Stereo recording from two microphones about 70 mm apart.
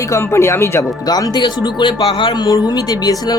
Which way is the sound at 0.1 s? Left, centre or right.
Left.